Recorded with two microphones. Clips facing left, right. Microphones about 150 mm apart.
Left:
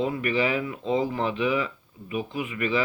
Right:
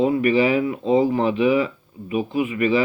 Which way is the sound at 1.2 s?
10° right (ahead or behind).